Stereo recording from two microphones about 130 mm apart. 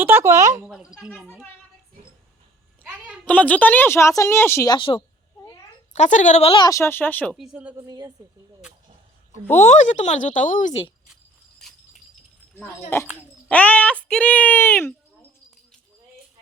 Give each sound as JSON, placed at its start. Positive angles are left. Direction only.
{"t": 0.0, "sound": "speech", "side_deg": -15}
{"t": 0.6, "sound": "speech", "side_deg": -5}
{"t": 2.8, "sound": "a sound", "side_deg": -5}
{"t": 3.2, "sound": "a woman's voice", "side_deg": 10}
{"t": 4.7, "sound": "a woman's voice", "side_deg": 40}
{"t": 5.9, "sound": "speech", "side_deg": 70}
{"t": 6.7, "sound": "a woman's voice", "side_deg": 20}
{"t": 7.3, "sound": "speech", "side_deg": -5}
{"t": 7.8, "sound": "a woman's voice", "side_deg": -30}
{"t": 9.6, "sound": "speech", "side_deg": 65}
{"t": 13.5, "sound": "a woman's voice", "side_deg": 10}